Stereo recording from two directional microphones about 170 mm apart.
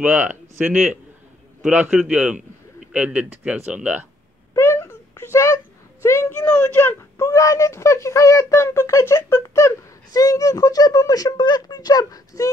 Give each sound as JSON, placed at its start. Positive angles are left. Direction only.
{"t": 0.0, "sound": "a man's voice", "side_deg": -10}
{"t": 4.6, "sound": "a sound", "side_deg": 15}
{"t": 6.0, "sound": "speech", "side_deg": 15}